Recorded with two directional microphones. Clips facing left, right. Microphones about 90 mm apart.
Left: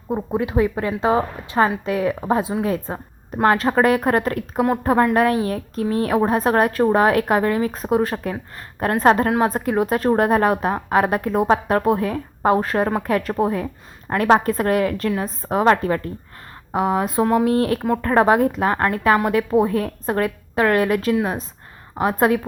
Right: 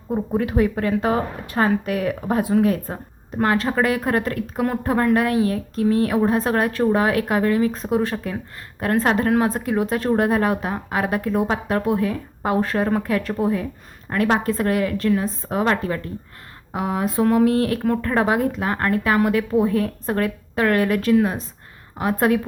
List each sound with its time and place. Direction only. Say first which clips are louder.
0.1 s a woman's voice: even; 20° left (ahead or behind); by 9.3 s 40° left (ahead or behind)
9.6 s a woman's voice: left 2 dB; 30° left (ahead or behind)